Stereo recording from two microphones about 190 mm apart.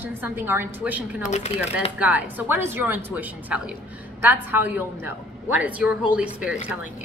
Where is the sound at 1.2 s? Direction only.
35° left (ahead or behind).